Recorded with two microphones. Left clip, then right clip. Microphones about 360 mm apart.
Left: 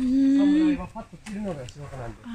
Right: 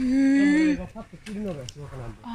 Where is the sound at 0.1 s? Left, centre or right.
Centre.